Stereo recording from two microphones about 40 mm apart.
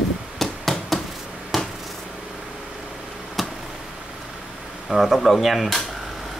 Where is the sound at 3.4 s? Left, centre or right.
Centre.